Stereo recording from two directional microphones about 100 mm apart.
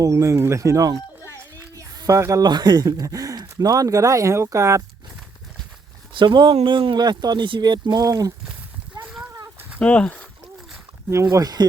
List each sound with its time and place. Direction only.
0.0 s speech: 30° right (ahead or behind)
1.5 s a sound: 35° right (ahead or behind)
2.5 s speech: 45° right (ahead or behind)
6.1 s speech: 50° right (ahead or behind)
9.8 s speech: 10° left (ahead or behind)
11.1 s speech: 30° right (ahead or behind)